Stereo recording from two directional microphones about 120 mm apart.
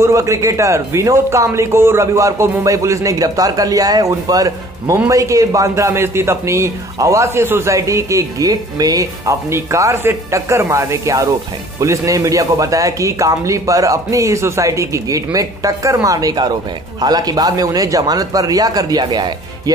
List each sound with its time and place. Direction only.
0.0 s a man's voice: 25° right (ahead or behind)